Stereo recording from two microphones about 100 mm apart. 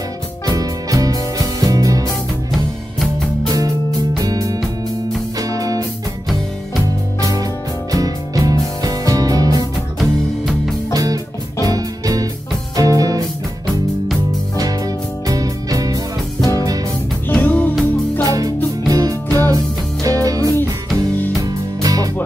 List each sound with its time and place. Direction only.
0.5 s music: 35° right (ahead or behind)
4.2 s music: 35° right (ahead or behind)
7.2 s music: 35° right (ahead or behind)
9.9 s music: centre (ahead or behind)
10.9 s music: 40° right (ahead or behind)
15.2 s music: 35° right (ahead or behind)
17.3 s music: 15° left (ahead or behind)
18.2 s music: 35° right (ahead or behind)